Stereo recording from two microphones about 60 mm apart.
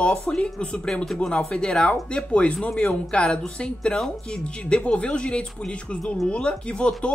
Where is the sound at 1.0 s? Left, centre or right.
Centre.